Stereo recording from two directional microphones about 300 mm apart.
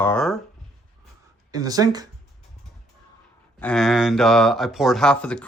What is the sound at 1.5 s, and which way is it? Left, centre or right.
Speech, centre.